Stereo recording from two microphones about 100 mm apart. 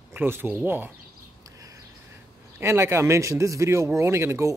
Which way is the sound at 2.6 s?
25° right (ahead or behind).